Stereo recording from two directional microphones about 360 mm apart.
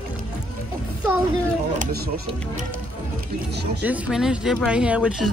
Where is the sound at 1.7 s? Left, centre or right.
Right.